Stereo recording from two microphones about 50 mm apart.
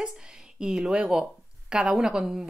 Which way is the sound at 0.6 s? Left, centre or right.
Centre.